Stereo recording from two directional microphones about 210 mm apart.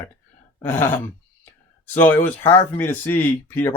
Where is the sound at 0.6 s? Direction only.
10° left (ahead or behind).